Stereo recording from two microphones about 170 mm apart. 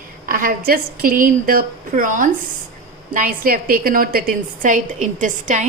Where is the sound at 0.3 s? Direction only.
55° right (ahead or behind).